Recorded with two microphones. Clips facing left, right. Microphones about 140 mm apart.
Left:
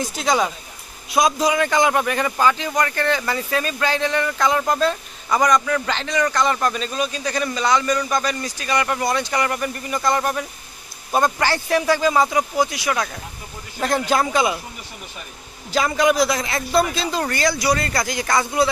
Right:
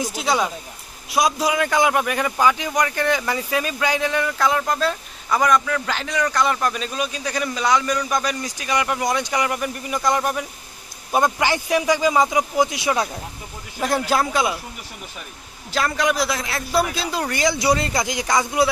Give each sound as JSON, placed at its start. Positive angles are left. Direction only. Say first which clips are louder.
{"t": 0.0, "sound": "speech", "louder": "left 1 dB", "side_deg": -5}
{"t": 13.7, "sound": "speech", "louder": "left 1 dB", "side_deg": -5}
{"t": 15.7, "sound": "speech", "louder": "left 3 dB", "side_deg": 0}
{"t": 17.4, "sound": "speech", "louder": "right 2 dB", "side_deg": -20}